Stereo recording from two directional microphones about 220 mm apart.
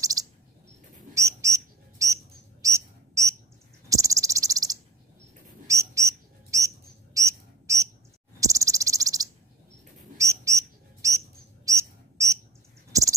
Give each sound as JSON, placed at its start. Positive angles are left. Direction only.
{"t": 0.0, "sound": "chirp", "side_deg": -15}
{"t": 1.1, "sound": "bird", "side_deg": -15}
{"t": 2.6, "sound": "a sound", "side_deg": -15}
{"t": 3.9, "sound": "cricket", "side_deg": -15}
{"t": 5.7, "sound": "bird", "side_deg": -15}
{"t": 7.2, "sound": "cricket", "side_deg": -15}
{"t": 10.1, "sound": "bird", "side_deg": -15}